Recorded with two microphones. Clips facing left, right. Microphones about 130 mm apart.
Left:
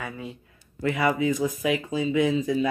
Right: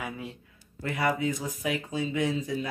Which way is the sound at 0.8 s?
90° left.